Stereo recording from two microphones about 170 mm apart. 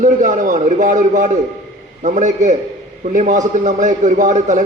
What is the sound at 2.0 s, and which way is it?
A man's voice, 45° right (ahead or behind).